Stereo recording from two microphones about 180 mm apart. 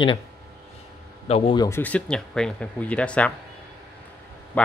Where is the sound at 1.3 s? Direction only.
25° left (ahead or behind).